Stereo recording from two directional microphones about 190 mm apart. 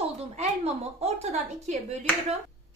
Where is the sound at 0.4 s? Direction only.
35° right (ahead or behind).